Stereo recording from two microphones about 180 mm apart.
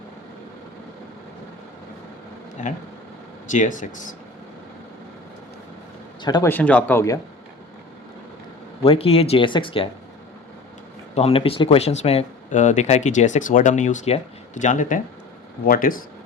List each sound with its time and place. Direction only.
2.6 s speech: 45° left (ahead or behind)
6.2 s speech: 20° left (ahead or behind)
6.5 s speech: 10° left (ahead or behind)
8.8 s speech: 30° left (ahead or behind)
11.1 s speech: 35° left (ahead or behind); by 16.0 s 50° left (ahead or behind)